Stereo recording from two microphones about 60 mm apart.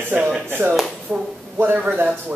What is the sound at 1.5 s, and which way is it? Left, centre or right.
Speech, right.